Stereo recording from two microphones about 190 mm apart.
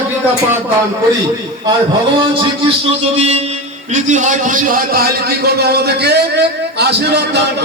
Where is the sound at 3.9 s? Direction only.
40° right (ahead or behind).